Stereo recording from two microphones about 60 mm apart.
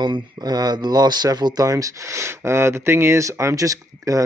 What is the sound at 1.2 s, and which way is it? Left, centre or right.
Speech, right.